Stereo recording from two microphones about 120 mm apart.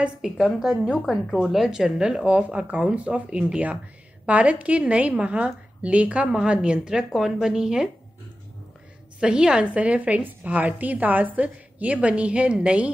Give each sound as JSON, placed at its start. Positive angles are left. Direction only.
{"t": 0.0, "sound": "a woman's voice", "side_deg": -5}
{"t": 9.2, "sound": "a woman's voice", "side_deg": -5}